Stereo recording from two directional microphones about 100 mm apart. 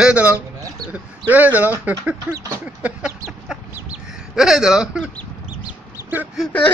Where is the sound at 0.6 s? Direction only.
40° right (ahead or behind).